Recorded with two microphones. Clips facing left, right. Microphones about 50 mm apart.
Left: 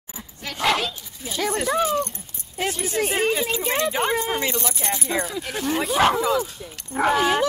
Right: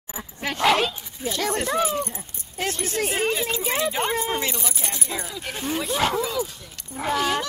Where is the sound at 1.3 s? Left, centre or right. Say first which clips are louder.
Left 2 dB; centre.